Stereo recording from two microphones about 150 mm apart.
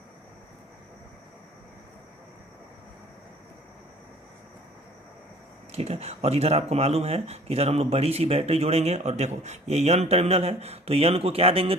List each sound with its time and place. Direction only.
5.7 s speech: 45° right (ahead or behind)